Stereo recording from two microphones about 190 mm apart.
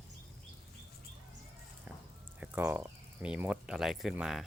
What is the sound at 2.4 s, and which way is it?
Speech, 10° right (ahead or behind).